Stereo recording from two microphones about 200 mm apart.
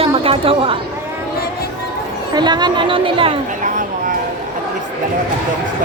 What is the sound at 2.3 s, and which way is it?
A woman's voice, 20° right (ahead or behind).